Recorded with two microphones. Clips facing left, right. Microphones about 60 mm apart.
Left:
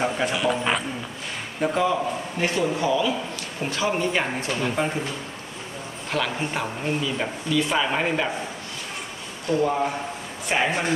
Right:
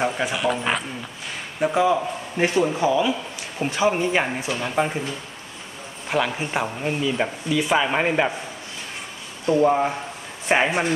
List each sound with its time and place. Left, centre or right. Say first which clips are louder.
0.0 s speech: right 1 dB; centre
2.3 s a man's voice: right 4 dB; right
6.0 s speech: right 3 dB; centre
9.5 s a man's voice: right 4 dB; right